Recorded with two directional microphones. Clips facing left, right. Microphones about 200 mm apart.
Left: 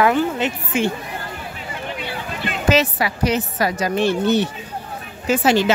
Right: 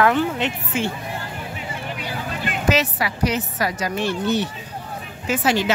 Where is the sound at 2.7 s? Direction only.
25° left (ahead or behind).